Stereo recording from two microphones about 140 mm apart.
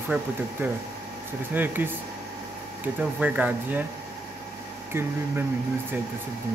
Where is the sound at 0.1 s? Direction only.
10° right (ahead or behind).